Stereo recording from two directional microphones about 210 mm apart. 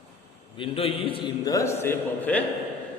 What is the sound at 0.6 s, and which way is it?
A man's voice, 25° left (ahead or behind).